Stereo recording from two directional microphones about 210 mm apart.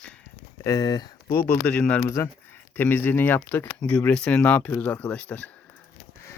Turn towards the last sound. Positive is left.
turn(degrees=5)  # may be behind; listen again after turning